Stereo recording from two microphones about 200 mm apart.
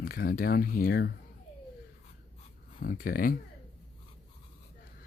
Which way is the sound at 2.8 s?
45° left (ahead or behind).